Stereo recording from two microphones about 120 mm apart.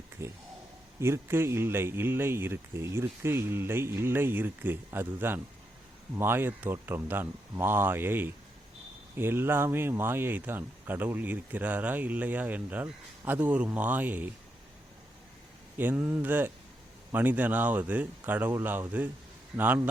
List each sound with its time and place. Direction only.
0.2 s speech: 20° right (ahead or behind)
15.8 s speech: 15° right (ahead or behind)